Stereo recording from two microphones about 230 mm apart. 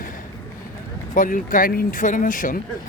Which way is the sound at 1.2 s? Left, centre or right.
Left.